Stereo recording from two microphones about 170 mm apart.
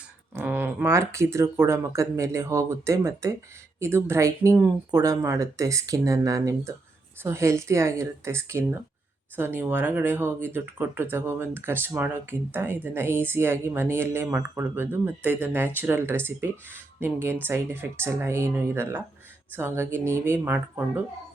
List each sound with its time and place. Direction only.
0.3 s speech: 10° right (ahead or behind)